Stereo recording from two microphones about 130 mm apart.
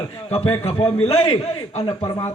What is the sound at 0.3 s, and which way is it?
A man's voice, 50° left (ahead or behind).